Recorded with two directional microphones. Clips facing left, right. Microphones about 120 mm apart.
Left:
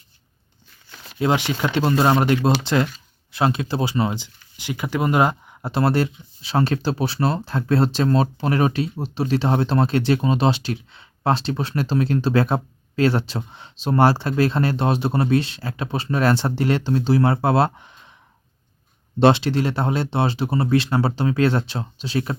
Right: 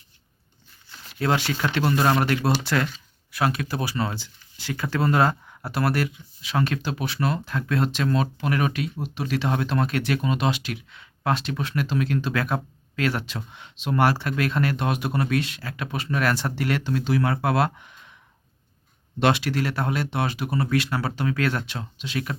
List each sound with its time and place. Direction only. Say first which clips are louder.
1.2 s speech: left 3 dB; 20° left (ahead or behind)
19.2 s speech: left 6 dB; 25° left (ahead or behind)